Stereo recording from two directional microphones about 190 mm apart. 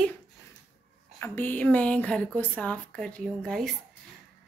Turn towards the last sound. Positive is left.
turn(degrees=0)  # may be behind; listen again after turning